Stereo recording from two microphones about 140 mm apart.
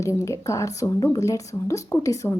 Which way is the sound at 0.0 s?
20° left (ahead or behind).